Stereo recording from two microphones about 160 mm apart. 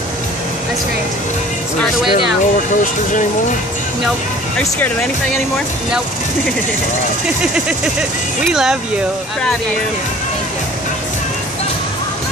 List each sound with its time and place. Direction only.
2.5 s speech: 55° left (ahead or behind)
4.6 s speech: 10° left (ahead or behind)
8.5 s speech: 5° right (ahead or behind)